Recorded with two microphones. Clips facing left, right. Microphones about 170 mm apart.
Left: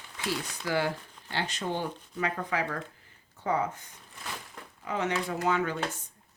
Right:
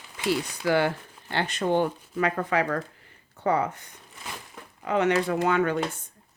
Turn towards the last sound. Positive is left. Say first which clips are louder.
# right 5 dB
turn(degrees=-60)  # may be behind; listen again after turning